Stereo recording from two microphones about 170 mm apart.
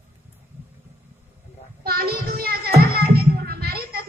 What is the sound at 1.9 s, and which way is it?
Music, 65° right (ahead or behind).